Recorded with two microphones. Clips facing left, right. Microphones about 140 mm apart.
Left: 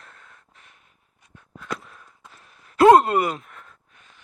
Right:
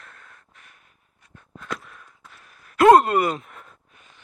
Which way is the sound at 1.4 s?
5° left (ahead or behind).